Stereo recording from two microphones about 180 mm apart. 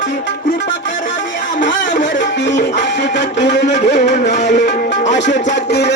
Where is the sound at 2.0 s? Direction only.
75° left (ahead or behind).